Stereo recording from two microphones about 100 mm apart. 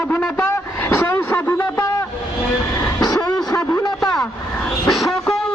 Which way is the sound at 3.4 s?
35° left (ahead or behind).